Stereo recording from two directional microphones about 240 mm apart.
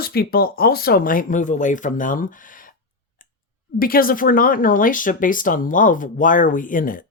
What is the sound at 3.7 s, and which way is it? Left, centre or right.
Speech, left.